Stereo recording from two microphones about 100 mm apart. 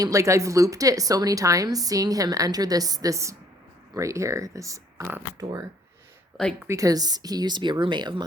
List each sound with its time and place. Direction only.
0.0 s a woman's voice: 30° right (ahead or behind)
6.7 s speech: 35° right (ahead or behind); by 8.2 s 50° right (ahead or behind)